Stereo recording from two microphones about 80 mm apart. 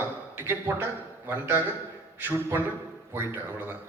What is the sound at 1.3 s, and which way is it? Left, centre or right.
A man's voice, right.